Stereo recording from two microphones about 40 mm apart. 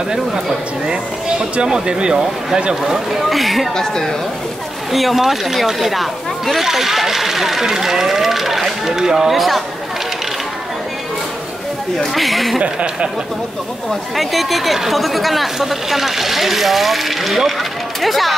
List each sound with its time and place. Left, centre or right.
1.4 s speech: centre
2.7 s speech: centre
3.7 s speech: centre
4.9 s speech: centre
12.0 s speech: centre
12.5 s speech: right
13.8 s speech: centre